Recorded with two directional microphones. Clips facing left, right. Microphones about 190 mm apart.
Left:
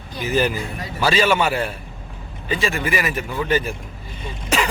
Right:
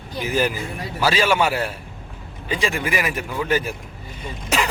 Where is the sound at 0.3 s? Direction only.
10° right (ahead or behind).